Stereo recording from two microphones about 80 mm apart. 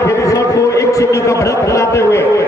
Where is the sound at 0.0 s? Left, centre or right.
Left.